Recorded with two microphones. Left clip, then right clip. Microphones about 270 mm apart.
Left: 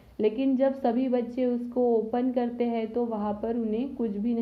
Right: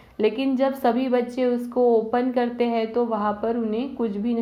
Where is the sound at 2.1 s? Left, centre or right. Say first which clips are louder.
Right 5 dB; centre.